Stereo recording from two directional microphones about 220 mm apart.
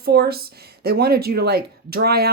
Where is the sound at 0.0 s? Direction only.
45° right (ahead or behind).